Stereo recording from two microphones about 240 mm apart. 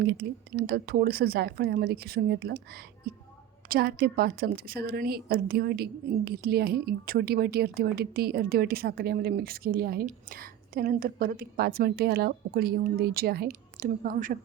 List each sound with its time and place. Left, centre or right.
0.0 s a woman's voice: right